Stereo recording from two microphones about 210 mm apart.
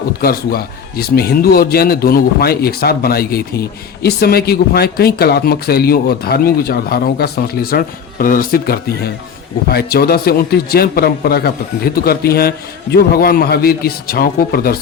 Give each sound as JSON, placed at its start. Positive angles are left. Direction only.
{"t": 0.2, "sound": "speech", "side_deg": 45}